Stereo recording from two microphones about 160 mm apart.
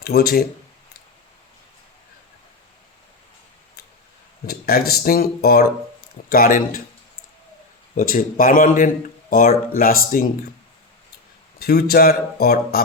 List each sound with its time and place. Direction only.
0.0 s speech: 70° left (ahead or behind)
4.4 s speech: 70° left (ahead or behind)
7.9 s speech: 60° left (ahead or behind)
11.6 s speech: 70° left (ahead or behind)